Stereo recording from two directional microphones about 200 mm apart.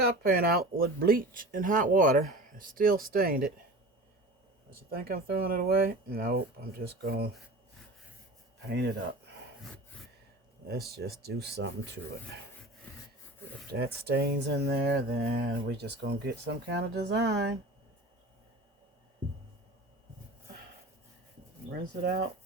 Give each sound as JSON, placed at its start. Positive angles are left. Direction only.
{"t": 0.0, "sound": "speech", "side_deg": -55}
{"t": 4.7, "sound": "speech", "side_deg": -50}
{"t": 10.7, "sound": "speech", "side_deg": -50}
{"t": 13.7, "sound": "speech", "side_deg": -50}
{"t": 21.7, "sound": "speech", "side_deg": -50}